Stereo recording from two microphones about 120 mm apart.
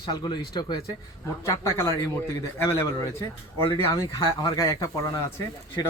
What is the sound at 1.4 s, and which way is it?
Speech, 25° left (ahead or behind).